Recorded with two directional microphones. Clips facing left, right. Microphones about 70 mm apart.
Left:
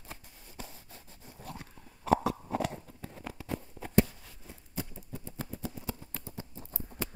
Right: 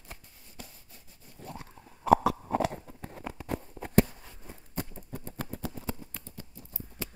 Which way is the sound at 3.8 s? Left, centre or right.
Right.